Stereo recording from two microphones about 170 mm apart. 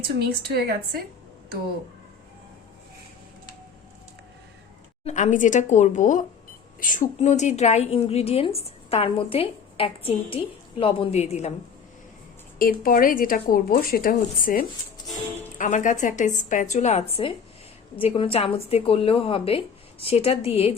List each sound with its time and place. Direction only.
0.2 s a woman's voice: 70° right (ahead or behind)
5.0 s a woman's voice: 45° left (ahead or behind)
12.5 s a woman's voice: 55° left (ahead or behind); by 20.7 s 35° left (ahead or behind)